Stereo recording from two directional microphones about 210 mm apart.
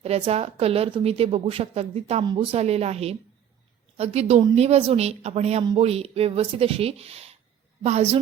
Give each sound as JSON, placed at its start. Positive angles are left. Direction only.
{"t": 0.0, "sound": "a woman's voice", "side_deg": -30}